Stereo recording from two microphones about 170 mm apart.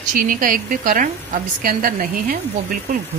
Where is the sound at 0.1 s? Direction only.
55° right (ahead or behind).